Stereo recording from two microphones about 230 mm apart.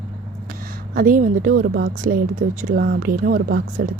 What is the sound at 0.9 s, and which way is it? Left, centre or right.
A woman's voice, right.